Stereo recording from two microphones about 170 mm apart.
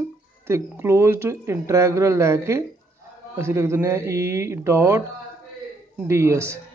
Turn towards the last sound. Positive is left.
turn(degrees=-15)  # may be behind; listen again after turning